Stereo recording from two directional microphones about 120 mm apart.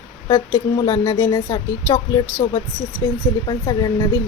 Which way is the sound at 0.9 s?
30° left (ahead or behind).